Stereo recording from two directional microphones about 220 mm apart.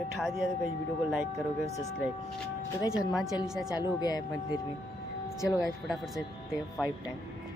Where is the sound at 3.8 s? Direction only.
15° left (ahead or behind).